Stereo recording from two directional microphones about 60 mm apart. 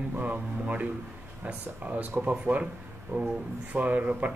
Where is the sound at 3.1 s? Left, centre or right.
Right.